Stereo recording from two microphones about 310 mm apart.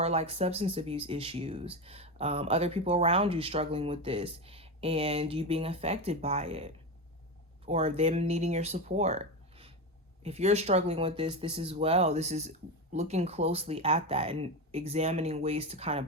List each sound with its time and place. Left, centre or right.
0.0 s speech: centre